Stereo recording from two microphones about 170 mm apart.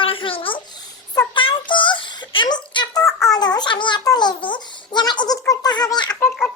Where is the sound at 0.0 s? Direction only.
30° left (ahead or behind).